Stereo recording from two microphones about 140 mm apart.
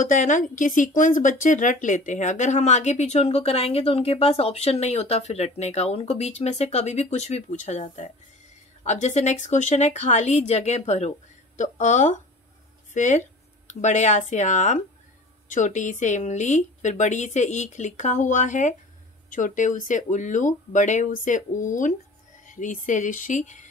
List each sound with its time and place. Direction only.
0.0 s a woman's voice: 65° left (ahead or behind)